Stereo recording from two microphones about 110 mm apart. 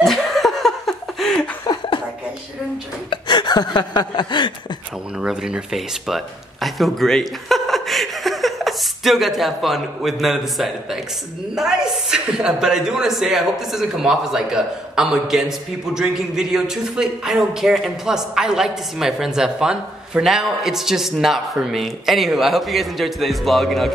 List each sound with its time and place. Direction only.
0.0 s laughter: centre (ahead or behind)
3.1 s a sound: 45° left (ahead or behind)
5.2 s a man's voice: 10° right (ahead or behind)